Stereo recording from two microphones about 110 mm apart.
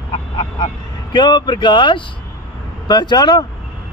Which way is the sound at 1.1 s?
40° left (ahead or behind).